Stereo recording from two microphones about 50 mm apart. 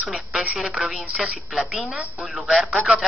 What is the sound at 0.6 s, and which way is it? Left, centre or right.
A woman's voice, centre.